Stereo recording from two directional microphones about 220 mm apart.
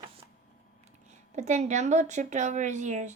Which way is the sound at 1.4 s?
35° right (ahead or behind).